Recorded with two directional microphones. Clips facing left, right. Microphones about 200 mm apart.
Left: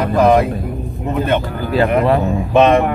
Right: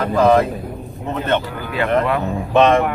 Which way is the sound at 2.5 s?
15° left (ahead or behind).